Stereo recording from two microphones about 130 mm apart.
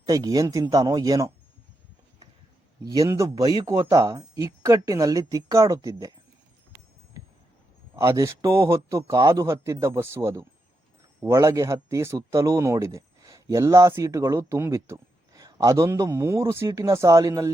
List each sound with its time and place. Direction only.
0.0 s speech: 30° right (ahead or behind)
2.8 s speech: 25° right (ahead or behind)
7.9 s speech: 20° right (ahead or behind)